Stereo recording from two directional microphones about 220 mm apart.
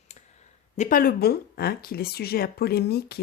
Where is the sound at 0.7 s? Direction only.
35° left (ahead or behind).